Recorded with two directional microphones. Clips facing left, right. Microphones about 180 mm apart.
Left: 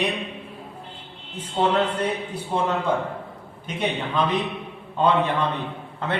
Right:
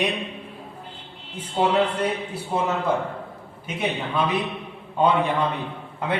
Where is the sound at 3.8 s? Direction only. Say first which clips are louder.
Left 1 dB; 5° right (ahead or behind).